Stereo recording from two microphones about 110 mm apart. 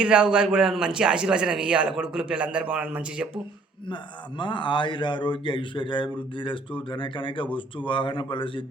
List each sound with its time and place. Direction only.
0.0 s a man's voice: 10° right (ahead or behind)
3.8 s a man's voice: 45° left (ahead or behind)